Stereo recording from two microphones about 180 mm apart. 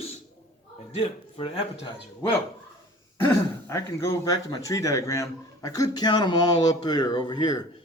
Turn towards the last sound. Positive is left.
turn(degrees=25)  # may be behind; listen again after turning